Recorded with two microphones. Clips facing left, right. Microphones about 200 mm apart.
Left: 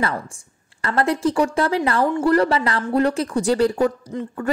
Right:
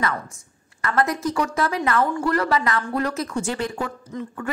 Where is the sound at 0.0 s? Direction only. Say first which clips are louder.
Left 2 dB; 30° left (ahead or behind).